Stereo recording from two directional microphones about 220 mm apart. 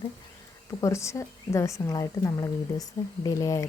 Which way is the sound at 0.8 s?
15° left (ahead or behind).